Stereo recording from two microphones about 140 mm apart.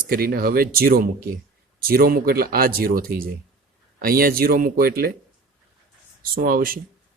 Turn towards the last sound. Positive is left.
turn(degrees=-90)